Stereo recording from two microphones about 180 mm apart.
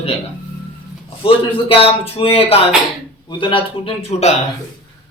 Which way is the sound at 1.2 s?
30° left (ahead or behind).